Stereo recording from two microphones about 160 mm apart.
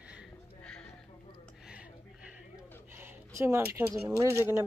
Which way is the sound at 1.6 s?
5° right (ahead or behind).